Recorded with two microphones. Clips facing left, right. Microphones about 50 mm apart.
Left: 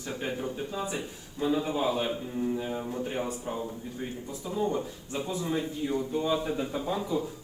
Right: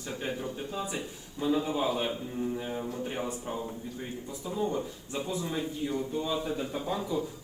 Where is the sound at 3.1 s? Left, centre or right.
Left.